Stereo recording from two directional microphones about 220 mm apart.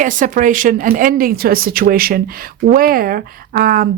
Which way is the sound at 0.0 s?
35° right (ahead or behind).